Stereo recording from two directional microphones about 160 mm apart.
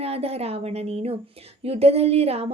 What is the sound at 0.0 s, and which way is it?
A woman's voice, 40° right (ahead or behind).